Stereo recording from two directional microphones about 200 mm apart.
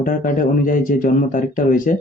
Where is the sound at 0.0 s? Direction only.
40° left (ahead or behind).